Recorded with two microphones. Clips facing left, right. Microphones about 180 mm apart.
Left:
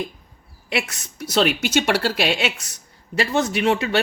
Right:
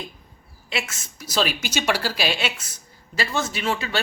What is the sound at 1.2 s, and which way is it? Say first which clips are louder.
Speech: left 5 dB; 65° left (ahead or behind).